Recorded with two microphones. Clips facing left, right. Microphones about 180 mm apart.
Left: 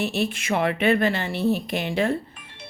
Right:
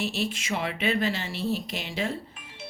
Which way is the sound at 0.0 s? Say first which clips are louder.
Left 4 dB; 60° left (ahead or behind).